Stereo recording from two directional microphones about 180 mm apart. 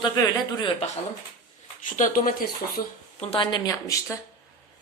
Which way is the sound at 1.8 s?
45° left (ahead or behind).